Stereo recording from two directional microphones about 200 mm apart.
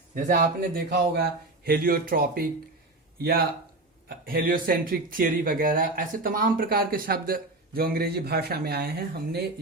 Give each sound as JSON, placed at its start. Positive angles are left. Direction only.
{"t": 0.1, "sound": "speech", "side_deg": -40}